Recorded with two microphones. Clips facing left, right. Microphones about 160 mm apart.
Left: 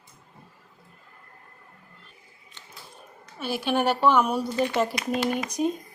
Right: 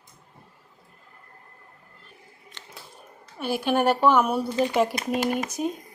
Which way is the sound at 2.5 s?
90° right.